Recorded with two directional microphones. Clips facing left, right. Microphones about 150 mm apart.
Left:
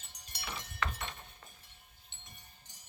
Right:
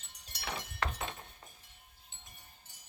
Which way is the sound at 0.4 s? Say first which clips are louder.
Right 2 dB; 75° right (ahead or behind).